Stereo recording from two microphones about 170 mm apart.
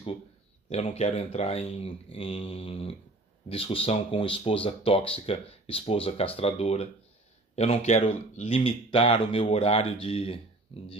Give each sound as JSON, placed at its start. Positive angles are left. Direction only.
{"t": 0.7, "sound": "speech", "side_deg": 40}